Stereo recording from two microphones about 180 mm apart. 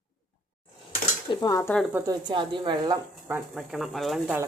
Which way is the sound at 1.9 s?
20° right (ahead or behind).